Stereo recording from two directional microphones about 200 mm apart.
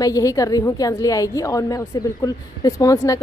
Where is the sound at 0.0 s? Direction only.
15° left (ahead or behind).